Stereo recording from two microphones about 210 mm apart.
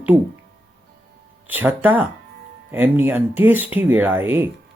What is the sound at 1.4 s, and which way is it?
Speech, 10° right (ahead or behind).